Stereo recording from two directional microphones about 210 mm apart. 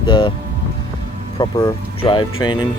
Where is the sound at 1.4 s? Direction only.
20° left (ahead or behind).